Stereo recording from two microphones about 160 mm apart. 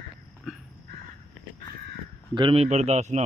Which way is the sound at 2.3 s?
35° right (ahead or behind).